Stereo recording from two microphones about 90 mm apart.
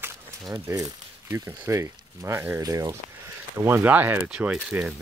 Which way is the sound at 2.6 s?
40° right (ahead or behind).